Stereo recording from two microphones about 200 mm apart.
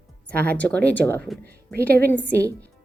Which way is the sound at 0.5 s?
5° left (ahead or behind).